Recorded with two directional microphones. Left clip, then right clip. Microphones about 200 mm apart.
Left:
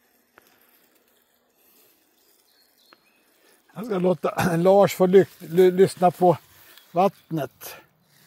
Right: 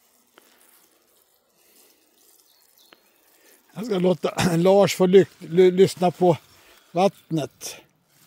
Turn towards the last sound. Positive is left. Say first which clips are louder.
# even
turn(degrees=-25)  # may be behind; listen again after turning